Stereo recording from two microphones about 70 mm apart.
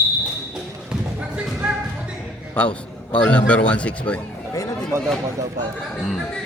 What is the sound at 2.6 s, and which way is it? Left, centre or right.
A man's voice, centre.